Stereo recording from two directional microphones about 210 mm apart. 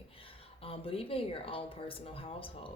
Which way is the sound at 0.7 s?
25° left (ahead or behind).